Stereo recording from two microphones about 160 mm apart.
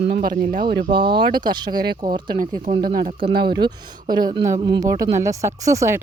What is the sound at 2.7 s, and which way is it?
Speech, 50° right (ahead or behind).